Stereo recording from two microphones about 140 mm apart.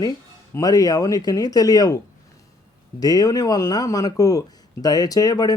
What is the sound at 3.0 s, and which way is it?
Speech, 25° left (ahead or behind).